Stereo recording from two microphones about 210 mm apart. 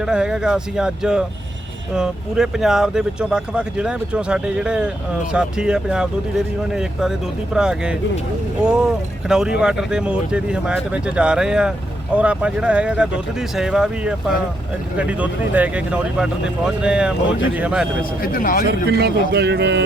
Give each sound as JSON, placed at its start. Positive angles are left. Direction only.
{"t": 0.0, "sound": "speech", "side_deg": -5}
{"t": 7.5, "sound": "speech", "side_deg": -5}
{"t": 18.2, "sound": "speech", "side_deg": 45}
{"t": 18.7, "sound": "speech", "side_deg": -50}